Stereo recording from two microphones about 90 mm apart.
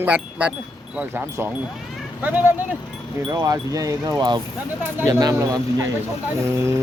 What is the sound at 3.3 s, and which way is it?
Wind chime, 40° right (ahead or behind).